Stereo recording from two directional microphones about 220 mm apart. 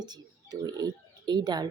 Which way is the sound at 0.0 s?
20° right (ahead or behind).